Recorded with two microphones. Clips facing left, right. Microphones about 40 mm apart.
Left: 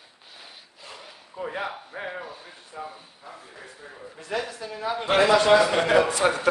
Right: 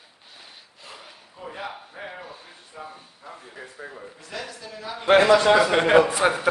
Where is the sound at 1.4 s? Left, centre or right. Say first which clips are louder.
Left 5 dB; left.